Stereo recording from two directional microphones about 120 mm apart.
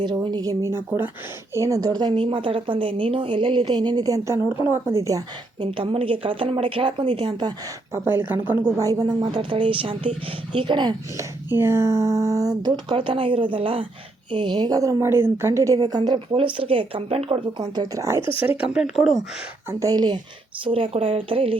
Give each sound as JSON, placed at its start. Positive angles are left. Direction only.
{"t": 0.0, "sound": "a woman's voice", "side_deg": -40}
{"t": 0.9, "sound": "speech", "side_deg": -15}
{"t": 1.5, "sound": "a woman's voice", "side_deg": -25}
{"t": 5.7, "sound": "speech", "side_deg": -45}
{"t": 7.9, "sound": "a woman's voice", "side_deg": -20}
{"t": 11.2, "sound": "a woman's voice", "side_deg": -20}
{"t": 17.6, "sound": "speech", "side_deg": -30}
{"t": 18.3, "sound": "speech", "side_deg": -10}
{"t": 19.8, "sound": "a woman's voice", "side_deg": -35}
{"t": 20.7, "sound": "speech", "side_deg": -50}